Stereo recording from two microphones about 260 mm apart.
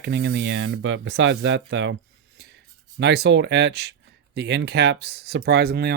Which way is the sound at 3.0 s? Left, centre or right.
Right.